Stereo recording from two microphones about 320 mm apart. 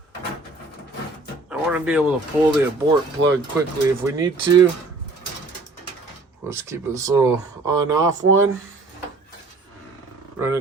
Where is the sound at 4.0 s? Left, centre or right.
Centre.